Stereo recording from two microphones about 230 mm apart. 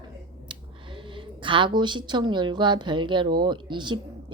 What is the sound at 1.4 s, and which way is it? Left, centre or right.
A woman's voice, right.